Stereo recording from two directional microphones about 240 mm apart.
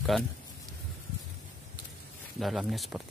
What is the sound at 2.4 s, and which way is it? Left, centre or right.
Speech, centre.